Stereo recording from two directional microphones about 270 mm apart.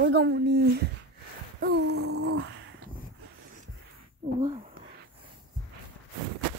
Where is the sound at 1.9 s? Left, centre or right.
Right.